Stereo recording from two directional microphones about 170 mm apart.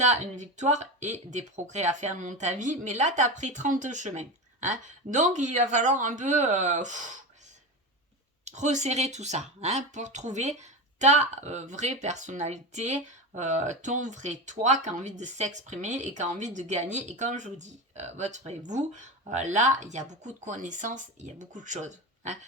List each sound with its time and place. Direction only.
0.0 s speech: 45° right (ahead or behind)
8.4 s speech: 45° right (ahead or behind)